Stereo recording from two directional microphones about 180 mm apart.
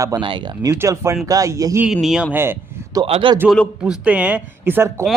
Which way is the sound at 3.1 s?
30° right (ahead or behind).